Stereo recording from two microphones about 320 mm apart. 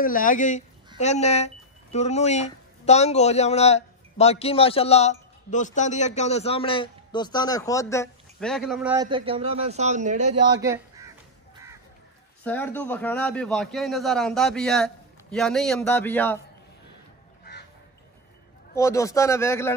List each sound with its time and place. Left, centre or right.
0.0 s speech: left; by 10.3 s right
10.5 s fowl: centre
12.4 s a man's voice: centre
18.8 s a man's voice: centre